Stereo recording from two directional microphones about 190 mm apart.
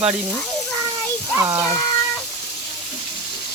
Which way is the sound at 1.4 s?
15° right (ahead or behind).